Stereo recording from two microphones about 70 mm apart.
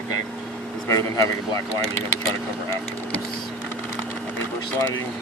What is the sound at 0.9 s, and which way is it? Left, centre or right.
Speech, left.